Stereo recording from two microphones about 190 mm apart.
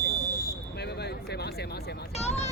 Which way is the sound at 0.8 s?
60° left (ahead or behind).